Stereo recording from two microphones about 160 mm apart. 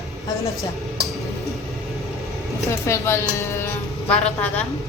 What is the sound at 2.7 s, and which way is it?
A woman's voice, 15° left (ahead or behind).